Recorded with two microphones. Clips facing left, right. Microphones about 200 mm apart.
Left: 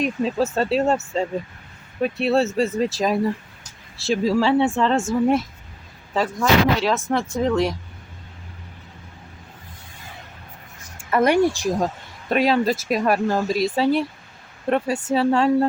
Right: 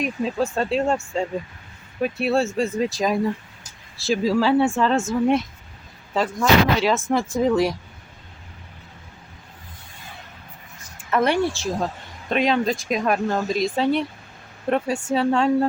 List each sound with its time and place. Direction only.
0.0 s speech: centre (ahead or behind)
2.0 s speech: centre (ahead or behind)
6.1 s speech: centre (ahead or behind)
11.1 s speech: 10° left (ahead or behind)